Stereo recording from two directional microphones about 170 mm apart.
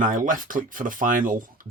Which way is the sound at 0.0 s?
50° right (ahead or behind).